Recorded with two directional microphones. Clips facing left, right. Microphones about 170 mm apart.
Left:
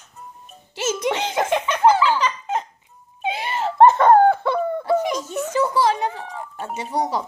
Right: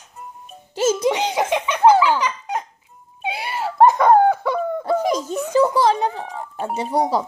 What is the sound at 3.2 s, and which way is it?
Wail, 10° right (ahead or behind).